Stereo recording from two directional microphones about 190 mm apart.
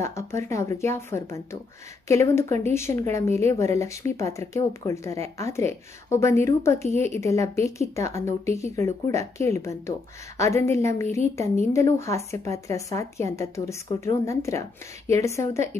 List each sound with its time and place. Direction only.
0.0 s speech: 15° left (ahead or behind)